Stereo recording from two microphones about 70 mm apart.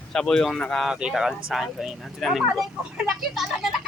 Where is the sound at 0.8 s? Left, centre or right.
Centre.